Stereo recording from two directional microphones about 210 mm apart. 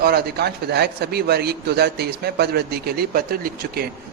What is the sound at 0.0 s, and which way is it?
A man's voice, 50° right (ahead or behind).